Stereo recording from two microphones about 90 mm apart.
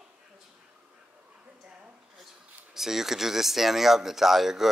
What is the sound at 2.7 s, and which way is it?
Speech, 5° right (ahead or behind).